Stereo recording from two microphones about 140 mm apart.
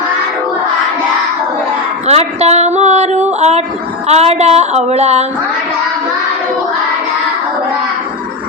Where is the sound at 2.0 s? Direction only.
50° right (ahead or behind).